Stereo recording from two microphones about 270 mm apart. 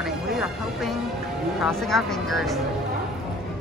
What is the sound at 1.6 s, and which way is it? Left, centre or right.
Speech, centre.